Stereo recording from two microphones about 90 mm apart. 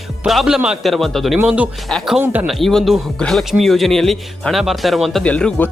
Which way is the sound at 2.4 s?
Centre (ahead or behind).